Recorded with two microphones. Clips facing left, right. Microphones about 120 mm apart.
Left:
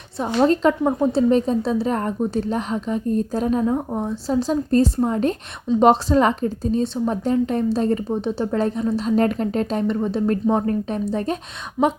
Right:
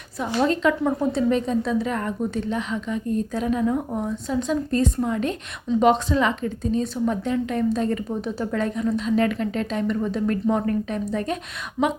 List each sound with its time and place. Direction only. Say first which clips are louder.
0.4 s a woman's voice: left 4 dB; 40° left (ahead or behind)
11.8 s speech: left 3 dB; 10° left (ahead or behind)